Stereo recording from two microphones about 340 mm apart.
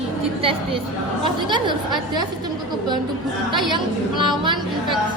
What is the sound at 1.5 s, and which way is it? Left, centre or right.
Speech, centre.